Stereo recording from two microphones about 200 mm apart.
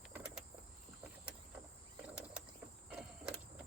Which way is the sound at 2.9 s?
5° right (ahead or behind).